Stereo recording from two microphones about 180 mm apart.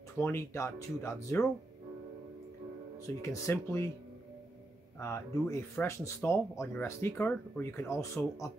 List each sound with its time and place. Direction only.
0.2 s speech: 15° left (ahead or behind)
3.2 s speech: 15° left (ahead or behind)
4.9 s speech: 15° left (ahead or behind)